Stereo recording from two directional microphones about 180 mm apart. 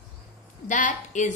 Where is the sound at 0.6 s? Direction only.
45° left (ahead or behind).